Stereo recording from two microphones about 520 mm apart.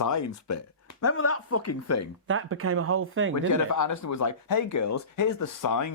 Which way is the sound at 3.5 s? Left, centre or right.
Left.